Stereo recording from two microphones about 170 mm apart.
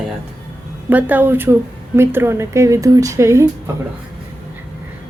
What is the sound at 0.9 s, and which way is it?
A woman's voice, 10° right (ahead or behind).